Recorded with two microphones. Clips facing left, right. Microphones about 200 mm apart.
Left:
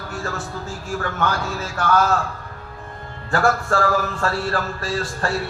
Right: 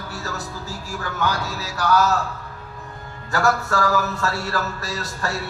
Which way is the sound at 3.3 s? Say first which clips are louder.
Left 2 dB; 40° right (ahead or behind).